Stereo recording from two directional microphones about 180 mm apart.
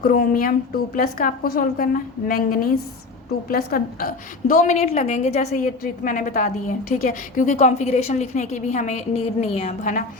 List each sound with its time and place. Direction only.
0.0 s a woman's voice: 55° left (ahead or behind)